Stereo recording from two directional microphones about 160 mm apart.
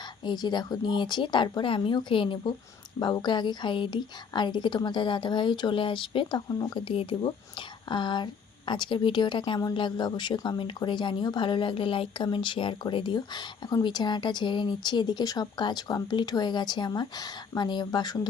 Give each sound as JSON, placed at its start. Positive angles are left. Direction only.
{"t": 0.3, "sound": "a woman's voice", "side_deg": 25}